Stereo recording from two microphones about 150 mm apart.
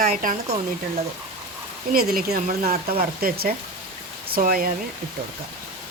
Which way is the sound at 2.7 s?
40° right (ahead or behind).